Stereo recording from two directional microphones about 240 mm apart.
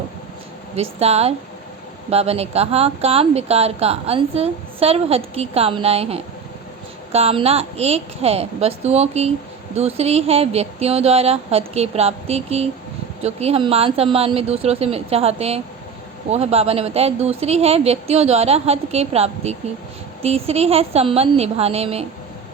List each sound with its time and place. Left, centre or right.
0.8 s speech: right